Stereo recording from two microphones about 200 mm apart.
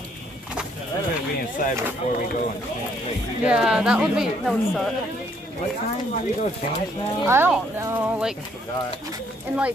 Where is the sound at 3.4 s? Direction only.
5° right (ahead or behind).